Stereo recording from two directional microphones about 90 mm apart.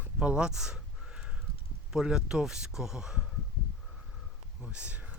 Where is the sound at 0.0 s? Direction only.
15° right (ahead or behind).